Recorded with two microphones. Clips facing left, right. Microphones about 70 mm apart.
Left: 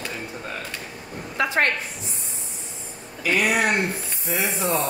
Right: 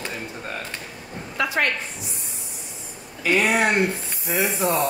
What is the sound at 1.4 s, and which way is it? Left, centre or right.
Speech, left.